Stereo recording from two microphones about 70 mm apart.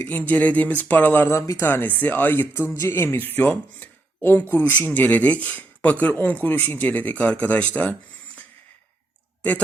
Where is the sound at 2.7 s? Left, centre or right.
Left; by 7.9 s centre.